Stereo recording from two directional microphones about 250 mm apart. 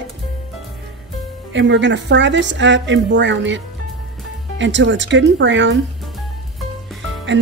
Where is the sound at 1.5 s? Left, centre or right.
Right.